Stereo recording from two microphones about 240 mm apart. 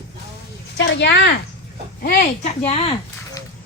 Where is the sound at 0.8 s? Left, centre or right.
Left.